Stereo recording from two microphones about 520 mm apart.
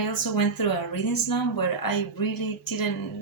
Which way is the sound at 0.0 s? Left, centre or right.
Left.